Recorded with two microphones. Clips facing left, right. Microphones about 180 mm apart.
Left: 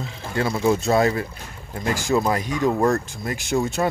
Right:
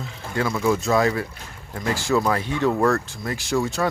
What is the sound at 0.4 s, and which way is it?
Speech, 30° left (ahead or behind).